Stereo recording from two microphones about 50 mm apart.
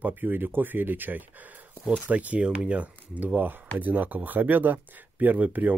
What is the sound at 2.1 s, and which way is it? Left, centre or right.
Speech, right.